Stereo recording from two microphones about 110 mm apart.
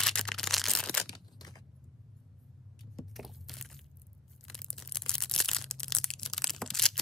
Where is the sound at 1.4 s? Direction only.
40° left (ahead or behind).